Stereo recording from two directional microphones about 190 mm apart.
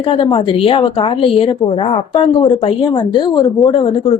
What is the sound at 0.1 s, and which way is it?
A woman's voice, 30° left (ahead or behind).